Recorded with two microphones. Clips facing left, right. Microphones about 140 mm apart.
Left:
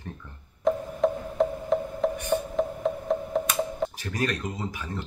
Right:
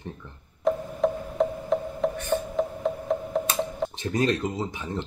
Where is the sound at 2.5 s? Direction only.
Centre (ahead or behind).